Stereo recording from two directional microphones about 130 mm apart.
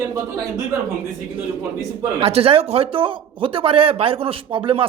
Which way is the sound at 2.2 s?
50° right (ahead or behind).